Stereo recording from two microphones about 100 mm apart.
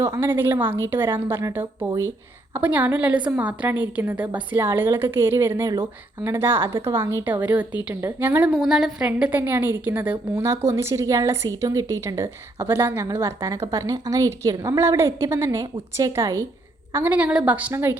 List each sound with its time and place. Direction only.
0.0 s a woman's voice: 25° right (ahead or behind)
2.5 s a woman's voice: 15° right (ahead or behind); by 5.9 s 35° right (ahead or behind)
6.2 s a woman's voice: 25° right (ahead or behind)
7.3 s a woman's voice: 15° right (ahead or behind)
8.5 s a woman's voice: 5° right (ahead or behind); by 12.6 s 30° right (ahead or behind)
12.6 s a woman's voice: 20° right (ahead or behind)
16.9 s a woman's voice: 15° right (ahead or behind)